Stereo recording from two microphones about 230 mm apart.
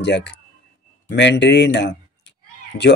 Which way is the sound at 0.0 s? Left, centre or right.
Left.